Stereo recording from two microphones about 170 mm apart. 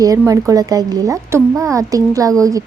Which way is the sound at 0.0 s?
20° right (ahead or behind).